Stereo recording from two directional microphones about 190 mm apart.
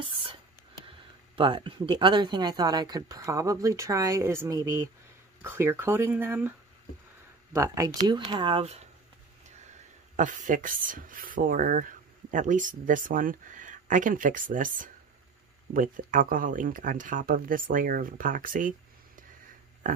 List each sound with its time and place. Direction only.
0.8 s speech: 25° right (ahead or behind); by 6.5 s 10° right (ahead or behind)
7.5 s speech: 15° right (ahead or behind)
10.1 s speech: 40° right (ahead or behind)